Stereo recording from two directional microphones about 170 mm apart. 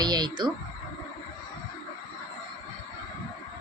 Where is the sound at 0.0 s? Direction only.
25° right (ahead or behind).